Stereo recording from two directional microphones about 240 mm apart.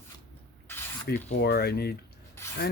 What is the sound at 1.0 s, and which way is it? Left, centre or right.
Speech, left.